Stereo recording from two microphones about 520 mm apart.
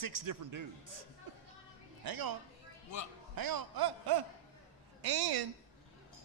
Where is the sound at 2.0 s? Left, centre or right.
Right.